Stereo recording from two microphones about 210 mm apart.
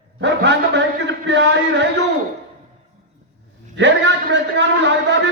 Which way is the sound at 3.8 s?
55° right (ahead or behind).